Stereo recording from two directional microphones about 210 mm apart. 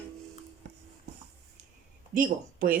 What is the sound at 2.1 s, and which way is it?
Speech, 40° right (ahead or behind).